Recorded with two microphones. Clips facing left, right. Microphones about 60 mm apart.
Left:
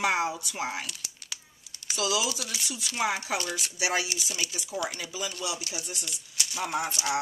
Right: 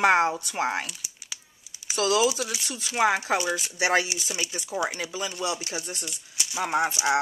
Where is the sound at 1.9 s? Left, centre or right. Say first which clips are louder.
Right 6 dB; right.